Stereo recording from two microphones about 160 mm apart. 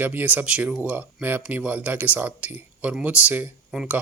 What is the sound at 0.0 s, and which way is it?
Speech, 10° right (ahead or behind).